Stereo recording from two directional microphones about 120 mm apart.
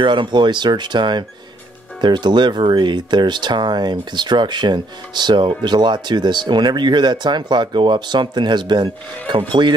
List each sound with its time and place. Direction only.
0.0 s speech: 40° right (ahead or behind)